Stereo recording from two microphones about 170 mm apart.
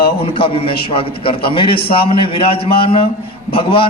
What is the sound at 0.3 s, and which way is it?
A man's voice, 35° left (ahead or behind).